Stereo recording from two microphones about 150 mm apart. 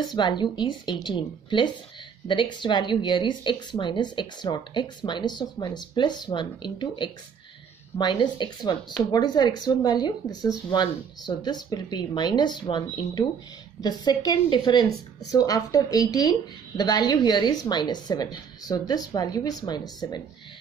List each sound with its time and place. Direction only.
0.1 s a woman's voice: 30° left (ahead or behind)